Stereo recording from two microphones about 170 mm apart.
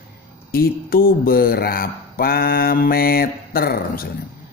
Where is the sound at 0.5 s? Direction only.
60° left (ahead or behind).